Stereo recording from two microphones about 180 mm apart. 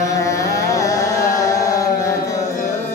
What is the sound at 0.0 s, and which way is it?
Carnatic music, 15° left (ahead or behind).